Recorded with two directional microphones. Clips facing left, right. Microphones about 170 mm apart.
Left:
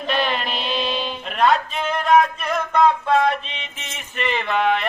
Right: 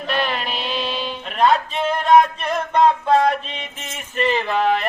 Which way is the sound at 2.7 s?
35° right (ahead or behind).